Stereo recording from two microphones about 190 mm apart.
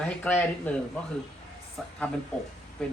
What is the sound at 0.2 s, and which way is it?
Speech, 10° left (ahead or behind).